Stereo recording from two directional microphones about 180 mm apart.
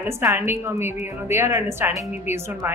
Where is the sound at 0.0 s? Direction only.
15° right (ahead or behind).